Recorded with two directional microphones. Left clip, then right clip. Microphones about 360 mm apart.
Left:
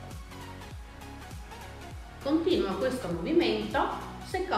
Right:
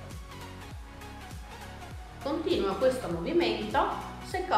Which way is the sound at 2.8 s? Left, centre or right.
Centre.